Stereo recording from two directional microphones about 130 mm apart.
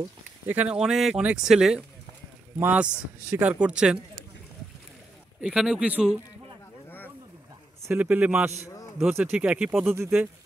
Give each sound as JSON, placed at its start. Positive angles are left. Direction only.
{"t": 0.5, "sound": "speech", "side_deg": -10}
{"t": 5.4, "sound": "speech", "side_deg": -5}
{"t": 7.9, "sound": "speech", "side_deg": -15}